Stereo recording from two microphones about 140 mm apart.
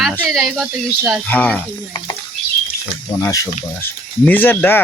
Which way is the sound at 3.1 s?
15° left (ahead or behind).